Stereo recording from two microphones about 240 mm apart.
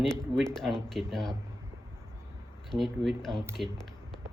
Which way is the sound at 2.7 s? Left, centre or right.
Centre.